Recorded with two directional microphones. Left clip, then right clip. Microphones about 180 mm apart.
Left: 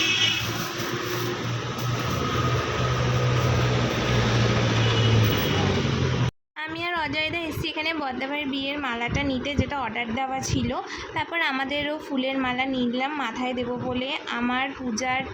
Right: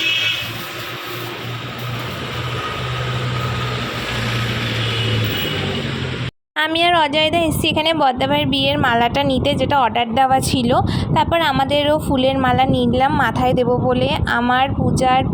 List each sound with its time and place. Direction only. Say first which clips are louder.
6.6 s speech: right 13 dB; 45° right (ahead or behind)